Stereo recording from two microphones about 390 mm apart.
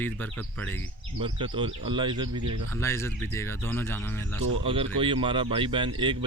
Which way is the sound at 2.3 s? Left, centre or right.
Right.